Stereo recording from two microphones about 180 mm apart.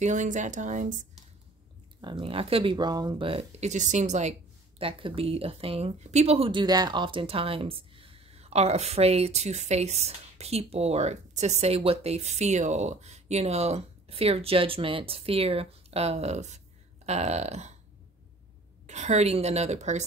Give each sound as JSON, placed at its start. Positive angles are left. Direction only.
{"t": 0.0, "sound": "speech", "side_deg": -40}
{"t": 2.0, "sound": "speech", "side_deg": -25}
{"t": 18.9, "sound": "speech", "side_deg": -40}